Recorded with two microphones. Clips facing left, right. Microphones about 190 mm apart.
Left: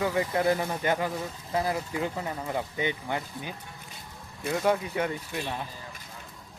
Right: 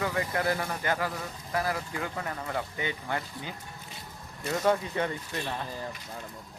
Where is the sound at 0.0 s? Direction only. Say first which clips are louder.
Left 4 dB; 20° left (ahead or behind).